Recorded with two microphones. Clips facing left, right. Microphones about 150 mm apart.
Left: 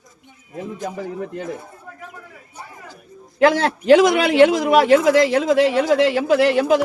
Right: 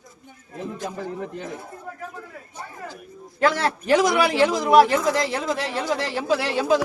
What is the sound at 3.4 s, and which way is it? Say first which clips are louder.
A man's voice: left 6 dB; 80° left.